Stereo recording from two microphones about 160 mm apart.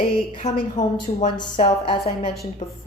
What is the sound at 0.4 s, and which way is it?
Speech, 45° left (ahead or behind).